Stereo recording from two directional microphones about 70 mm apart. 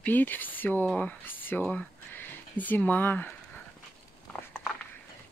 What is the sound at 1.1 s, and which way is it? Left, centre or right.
Speech, left.